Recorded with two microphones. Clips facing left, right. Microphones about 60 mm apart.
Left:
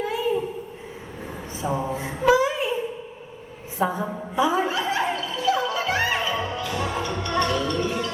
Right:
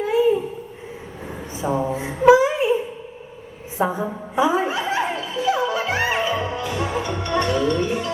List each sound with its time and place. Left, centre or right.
1.6 s speech: centre
1.9 s a sound: right
3.8 s a woman's voice: right
4.4 s music: right